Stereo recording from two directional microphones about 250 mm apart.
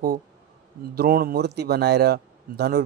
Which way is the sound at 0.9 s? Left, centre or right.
Right.